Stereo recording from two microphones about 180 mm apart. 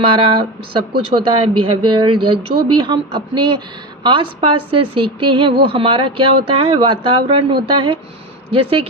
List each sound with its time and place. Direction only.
0.0 s a woman's voice: 30° right (ahead or behind)